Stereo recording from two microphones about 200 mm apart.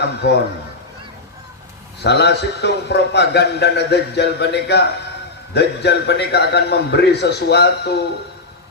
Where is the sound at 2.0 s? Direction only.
55° left (ahead or behind).